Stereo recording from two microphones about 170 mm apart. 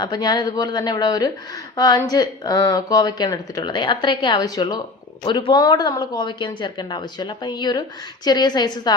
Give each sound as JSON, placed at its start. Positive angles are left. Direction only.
{"t": 0.0, "sound": "a woman's voice", "side_deg": 25}